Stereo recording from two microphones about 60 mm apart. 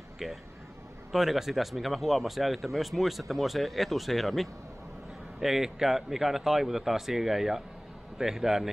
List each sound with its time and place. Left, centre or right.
0.2 s a man's voice: centre